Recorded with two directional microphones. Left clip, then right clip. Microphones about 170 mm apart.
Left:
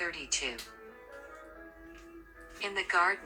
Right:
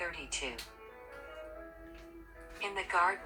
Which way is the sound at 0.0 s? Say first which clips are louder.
Left 4 dB; 50° left (ahead or behind).